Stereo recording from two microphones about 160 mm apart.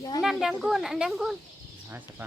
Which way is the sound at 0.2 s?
Centre (ahead or behind).